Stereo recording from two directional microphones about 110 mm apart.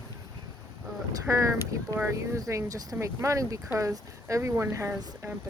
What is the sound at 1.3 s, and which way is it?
Speech, 30° right (ahead or behind).